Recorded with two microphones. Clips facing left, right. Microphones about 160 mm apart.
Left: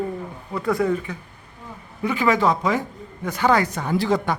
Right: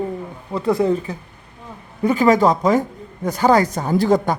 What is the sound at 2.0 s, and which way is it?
A woman's voice, 40° right (ahead or behind).